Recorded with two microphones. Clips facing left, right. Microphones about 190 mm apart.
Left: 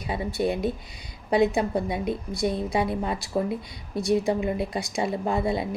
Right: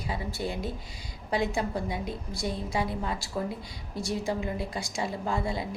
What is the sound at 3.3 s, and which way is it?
Speech, 20° left (ahead or behind).